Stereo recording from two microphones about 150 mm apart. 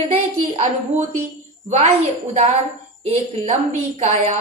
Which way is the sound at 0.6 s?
50° right (ahead or behind).